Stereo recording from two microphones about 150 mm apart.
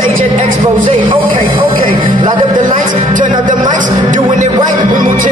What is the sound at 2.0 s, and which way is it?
Music, 30° right (ahead or behind).